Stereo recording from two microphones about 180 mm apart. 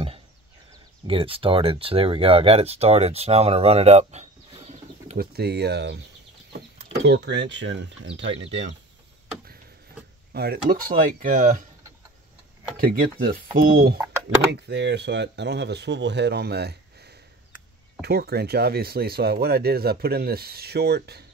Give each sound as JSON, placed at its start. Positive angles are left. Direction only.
{"t": 1.0, "sound": "speech", "side_deg": -30}
{"t": 5.1, "sound": "speech", "side_deg": -60}
{"t": 7.1, "sound": "speech", "side_deg": -75}
{"t": 10.3, "sound": "speech", "side_deg": -60}
{"t": 12.7, "sound": "speech", "side_deg": -55}
{"t": 14.5, "sound": "speech", "side_deg": -70}